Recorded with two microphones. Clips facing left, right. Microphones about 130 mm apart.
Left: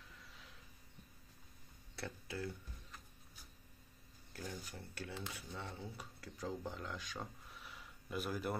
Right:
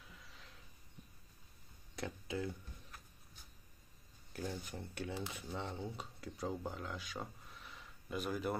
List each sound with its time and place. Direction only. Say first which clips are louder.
0.1 s a sound: even; centre (ahead or behind)
2.0 s speech: right 4 dB; 15° right (ahead or behind)
4.3 s speech: right 4 dB; 15° right (ahead or behind); by 8.5 s centre (ahead or behind)